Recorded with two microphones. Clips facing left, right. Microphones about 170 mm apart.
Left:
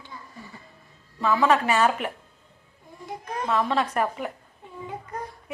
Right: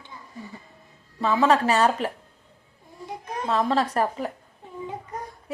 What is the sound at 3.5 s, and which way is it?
Speech, 35° right (ahead or behind).